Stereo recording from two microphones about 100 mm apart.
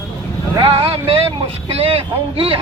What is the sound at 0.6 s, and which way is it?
Speech, 70° right (ahead or behind).